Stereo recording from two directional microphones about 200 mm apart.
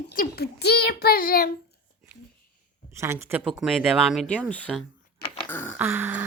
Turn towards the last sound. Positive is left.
turn(degrees=-10)  # may be behind; listen again after turning